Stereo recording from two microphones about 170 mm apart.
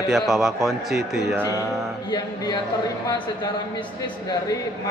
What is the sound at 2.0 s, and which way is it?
Music, 25° left (ahead or behind).